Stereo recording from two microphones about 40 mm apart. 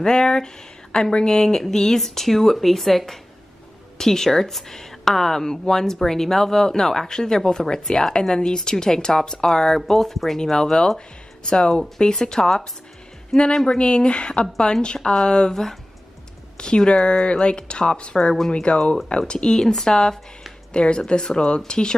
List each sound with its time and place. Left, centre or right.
0.0 s speech: centre
13.7 s speech: left
15.5 s speech: centre
16.5 s speech: left